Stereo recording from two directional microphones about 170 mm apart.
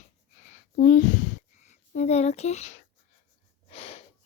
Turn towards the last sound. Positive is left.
turn(degrees=35)  # may be behind; listen again after turning